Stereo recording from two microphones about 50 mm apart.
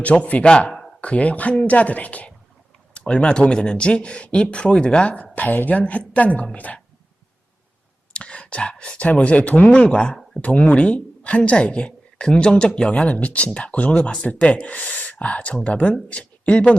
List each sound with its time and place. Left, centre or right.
0.0 s a woman's voice: left
8.1 s a woman's voice: left